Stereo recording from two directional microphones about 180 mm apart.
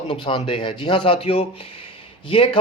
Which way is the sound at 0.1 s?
30° left (ahead or behind).